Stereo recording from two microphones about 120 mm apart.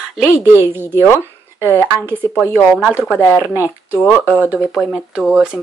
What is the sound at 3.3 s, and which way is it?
Speech, 15° right (ahead or behind).